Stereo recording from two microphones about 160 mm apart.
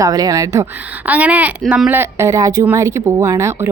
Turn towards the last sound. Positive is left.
turn(degrees=-20)  # may be behind; listen again after turning